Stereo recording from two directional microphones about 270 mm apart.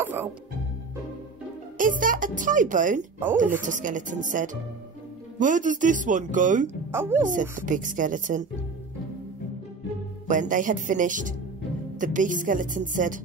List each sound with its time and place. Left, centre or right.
0.0 s music: centre
1.8 s a child's voice: right
6.9 s speech: centre
7.2 s a child's voice: right
10.2 s a child's voice: right